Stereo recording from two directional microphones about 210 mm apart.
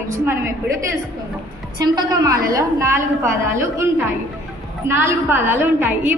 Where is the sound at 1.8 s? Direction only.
20° right (ahead or behind).